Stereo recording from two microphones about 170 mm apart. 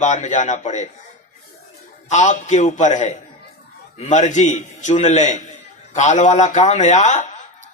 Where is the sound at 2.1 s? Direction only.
45° left (ahead or behind).